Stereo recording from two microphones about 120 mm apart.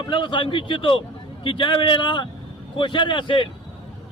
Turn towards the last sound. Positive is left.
turn(degrees=40)  # may be behind; listen again after turning